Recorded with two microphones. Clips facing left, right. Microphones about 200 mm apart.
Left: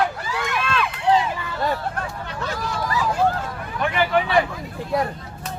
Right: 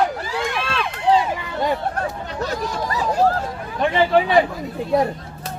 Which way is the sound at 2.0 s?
40° right (ahead or behind).